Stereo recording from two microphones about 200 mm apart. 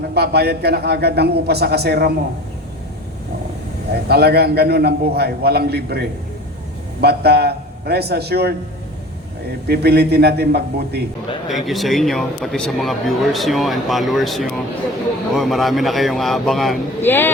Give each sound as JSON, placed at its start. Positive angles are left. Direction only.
{"t": 0.1, "sound": "a man's voice", "side_deg": -55}
{"t": 3.9, "sound": "a man's voice", "side_deg": -55}
{"t": 9.6, "sound": "a man's voice", "side_deg": -55}
{"t": 11.4, "sound": "speech", "side_deg": 0}